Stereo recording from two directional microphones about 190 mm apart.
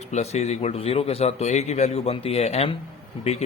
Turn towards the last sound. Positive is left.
turn(degrees=35)  # may be behind; listen again after turning